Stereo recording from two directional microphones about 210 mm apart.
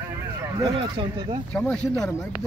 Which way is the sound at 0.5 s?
20° right (ahead or behind).